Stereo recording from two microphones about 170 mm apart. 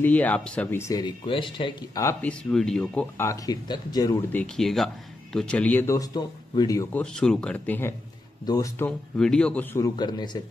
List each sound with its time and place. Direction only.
0.0 s speech: 10° left (ahead or behind)
2.2 s speech: 5° left (ahead or behind); by 4.2 s 25° left (ahead or behind)
4.3 s speech: 5° left (ahead or behind)
7.0 s speech: 5° left (ahead or behind)
9.2 s speech: 5° left (ahead or behind); by 10.4 s 25° left (ahead or behind)